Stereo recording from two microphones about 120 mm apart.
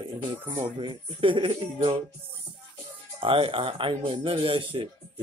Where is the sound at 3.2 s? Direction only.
50° right (ahead or behind).